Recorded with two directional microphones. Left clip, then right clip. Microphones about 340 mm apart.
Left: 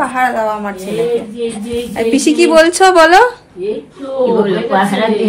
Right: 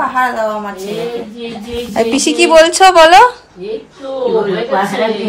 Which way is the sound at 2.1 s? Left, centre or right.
Centre.